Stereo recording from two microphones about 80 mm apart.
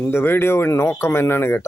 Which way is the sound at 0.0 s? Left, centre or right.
Left.